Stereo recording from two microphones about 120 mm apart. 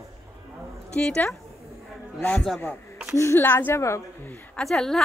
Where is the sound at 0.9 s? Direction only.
5° left (ahead or behind).